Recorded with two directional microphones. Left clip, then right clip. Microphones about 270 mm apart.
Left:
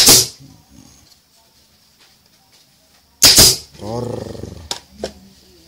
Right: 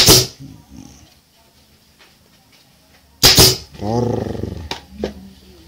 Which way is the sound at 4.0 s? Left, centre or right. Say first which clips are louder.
Right 6 dB; centre.